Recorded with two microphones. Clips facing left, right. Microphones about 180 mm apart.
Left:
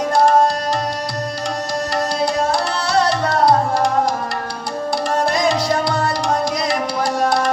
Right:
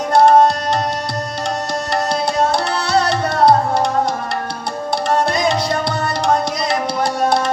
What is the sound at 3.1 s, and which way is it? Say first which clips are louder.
Music: right 3 dB; 25° right (ahead or behind).